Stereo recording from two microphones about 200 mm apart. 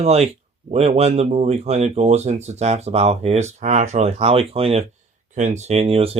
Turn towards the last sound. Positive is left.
turn(degrees=-30)  # may be behind; listen again after turning